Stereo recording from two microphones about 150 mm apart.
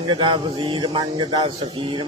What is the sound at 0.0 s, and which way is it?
Speech, 35° right (ahead or behind).